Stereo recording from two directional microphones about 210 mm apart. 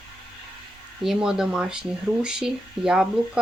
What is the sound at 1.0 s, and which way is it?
Speech, 5° right (ahead or behind).